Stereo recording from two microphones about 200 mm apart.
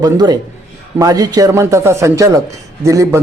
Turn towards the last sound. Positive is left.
turn(degrees=-15)  # may be behind; listen again after turning